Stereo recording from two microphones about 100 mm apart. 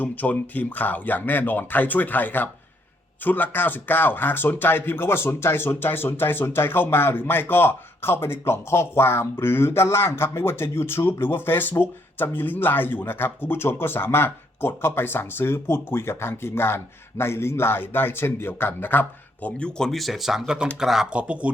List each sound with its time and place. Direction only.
0.0 s speech: 15° left (ahead or behind); by 21.5 s 15° right (ahead or behind)